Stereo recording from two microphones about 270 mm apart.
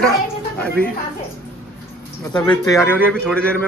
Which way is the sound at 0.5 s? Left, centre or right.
Centre.